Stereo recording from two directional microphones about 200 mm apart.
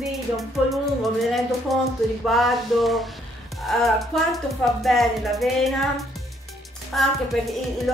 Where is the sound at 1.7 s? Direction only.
Centre (ahead or behind).